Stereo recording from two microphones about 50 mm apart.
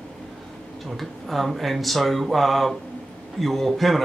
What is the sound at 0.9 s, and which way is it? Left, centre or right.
Speech, centre.